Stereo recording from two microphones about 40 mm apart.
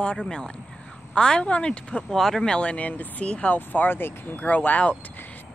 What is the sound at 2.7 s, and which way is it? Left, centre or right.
Speech, left.